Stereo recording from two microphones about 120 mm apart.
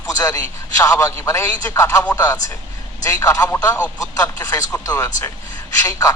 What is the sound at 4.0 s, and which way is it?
A man's voice, 25° left (ahead or behind).